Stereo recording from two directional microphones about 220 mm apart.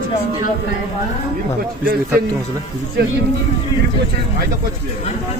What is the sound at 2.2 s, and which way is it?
Speech, 40° right (ahead or behind).